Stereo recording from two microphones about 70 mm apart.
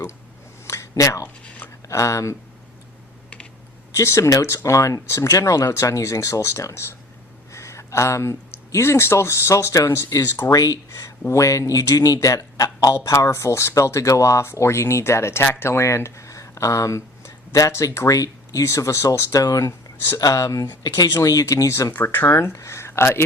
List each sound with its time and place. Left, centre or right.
0.7 s a sound: left
1.9 s speech: left
3.9 s speech: left
10.5 s speech: left
12.9 s speech: left
19.4 s speech: left
21.2 s speech: left
21.9 s speech: left
22.3 s speech: left